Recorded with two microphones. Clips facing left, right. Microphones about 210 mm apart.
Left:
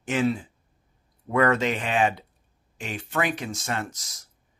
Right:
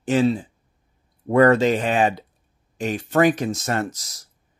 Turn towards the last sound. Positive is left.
turn(degrees=-35)  # may be behind; listen again after turning